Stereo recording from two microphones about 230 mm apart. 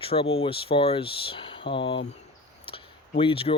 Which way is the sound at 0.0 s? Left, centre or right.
Left.